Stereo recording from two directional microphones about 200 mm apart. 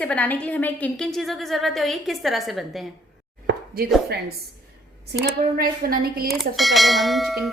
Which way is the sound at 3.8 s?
50° right (ahead or behind).